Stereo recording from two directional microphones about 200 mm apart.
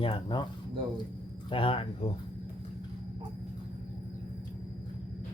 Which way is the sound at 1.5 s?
25° left (ahead or behind).